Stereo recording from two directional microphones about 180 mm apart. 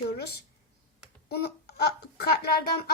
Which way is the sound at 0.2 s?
65° left (ahead or behind).